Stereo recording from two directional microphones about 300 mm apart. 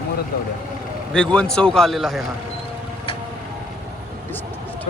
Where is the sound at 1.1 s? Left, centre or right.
Centre.